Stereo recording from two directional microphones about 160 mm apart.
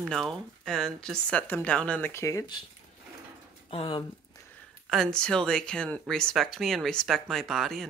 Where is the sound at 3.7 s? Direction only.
35° left (ahead or behind).